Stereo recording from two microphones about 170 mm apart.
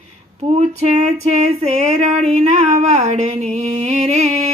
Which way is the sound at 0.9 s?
40° right (ahead or behind).